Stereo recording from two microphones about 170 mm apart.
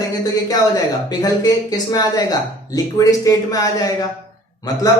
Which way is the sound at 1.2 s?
20° left (ahead or behind).